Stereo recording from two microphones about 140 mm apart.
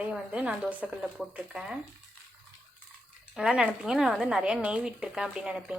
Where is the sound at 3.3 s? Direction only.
5° right (ahead or behind).